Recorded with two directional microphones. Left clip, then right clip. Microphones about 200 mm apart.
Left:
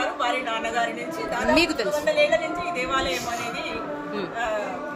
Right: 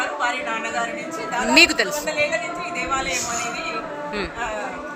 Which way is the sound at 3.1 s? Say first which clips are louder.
Right 3 dB; 50° right (ahead or behind).